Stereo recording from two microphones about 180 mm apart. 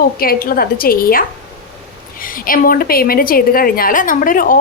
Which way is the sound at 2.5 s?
50° left (ahead or behind).